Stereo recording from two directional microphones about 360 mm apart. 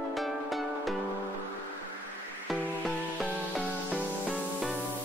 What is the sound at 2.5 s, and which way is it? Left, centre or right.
Music, centre.